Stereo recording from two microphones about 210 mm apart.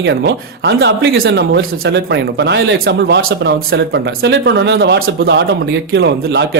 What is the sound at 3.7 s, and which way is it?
A man's voice, 55° right (ahead or behind).